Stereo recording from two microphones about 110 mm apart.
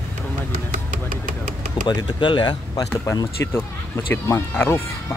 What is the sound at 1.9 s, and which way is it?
Speech, 40° left (ahead or behind).